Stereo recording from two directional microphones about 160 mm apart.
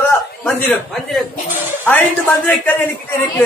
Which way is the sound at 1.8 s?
10° left (ahead or behind).